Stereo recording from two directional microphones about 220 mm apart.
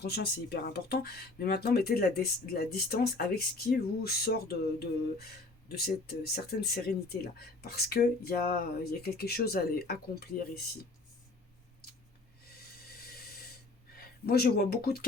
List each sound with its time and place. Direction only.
0.0 s speech: 45° left (ahead or behind)
14.0 s speech: 45° left (ahead or behind)